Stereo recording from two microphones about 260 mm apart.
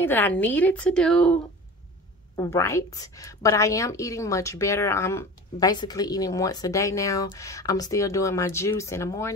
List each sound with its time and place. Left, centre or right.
0.0 s a woman's voice: centre